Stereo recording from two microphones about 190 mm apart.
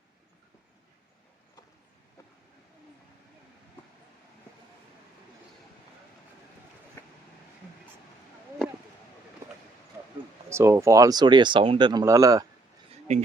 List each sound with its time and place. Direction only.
7.0 s vehicle: 10° left (ahead or behind)
10.5 s speech: 15° right (ahead or behind)
13.1 s speech: 40° right (ahead or behind)